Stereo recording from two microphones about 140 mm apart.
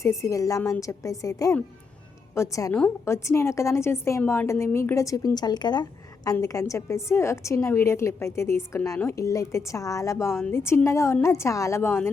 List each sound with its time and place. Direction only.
0.0 s a woman's voice: 20° left (ahead or behind)